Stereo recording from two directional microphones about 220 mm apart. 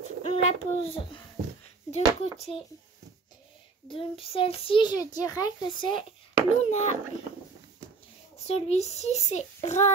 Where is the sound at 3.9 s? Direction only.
25° left (ahead or behind).